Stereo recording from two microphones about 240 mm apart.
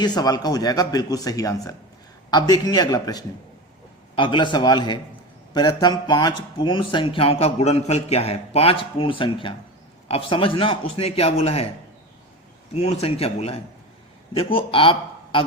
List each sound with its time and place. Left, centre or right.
0.0 s speech: centre
12.7 s speech: left